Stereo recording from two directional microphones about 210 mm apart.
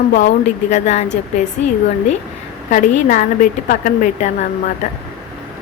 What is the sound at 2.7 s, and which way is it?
Speech, 40° left (ahead or behind).